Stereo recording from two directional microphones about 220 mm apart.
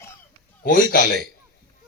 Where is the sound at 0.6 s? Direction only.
40° left (ahead or behind).